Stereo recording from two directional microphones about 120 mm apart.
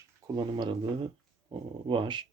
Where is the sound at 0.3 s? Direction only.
35° right (ahead or behind).